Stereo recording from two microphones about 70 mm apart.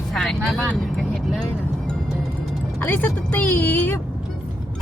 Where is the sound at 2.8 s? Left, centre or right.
Left.